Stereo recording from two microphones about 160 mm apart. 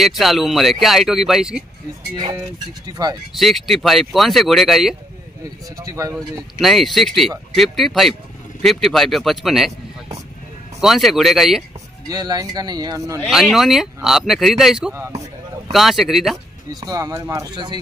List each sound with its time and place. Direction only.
0.0 s speech: centre (ahead or behind)
2.9 s speech: 25° right (ahead or behind)
3.3 s speech: centre (ahead or behind)
5.4 s speech: 20° right (ahead or behind)
6.6 s speech: centre (ahead or behind)
10.8 s speech: centre (ahead or behind)
12.1 s speech: 25° right (ahead or behind)
13.3 s speech: centre (ahead or behind)
15.0 s speech: 15° right (ahead or behind)
15.7 s speech: centre (ahead or behind)
16.8 s speech: 20° right (ahead or behind)